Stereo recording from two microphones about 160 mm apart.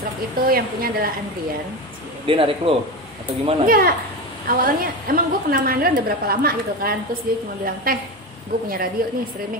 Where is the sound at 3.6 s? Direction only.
65° right (ahead or behind).